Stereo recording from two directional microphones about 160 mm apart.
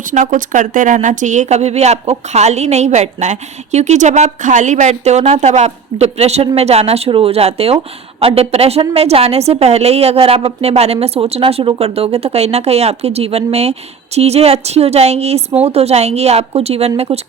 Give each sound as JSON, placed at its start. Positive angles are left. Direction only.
{"t": 0.1, "sound": "a woman's voice", "side_deg": -50}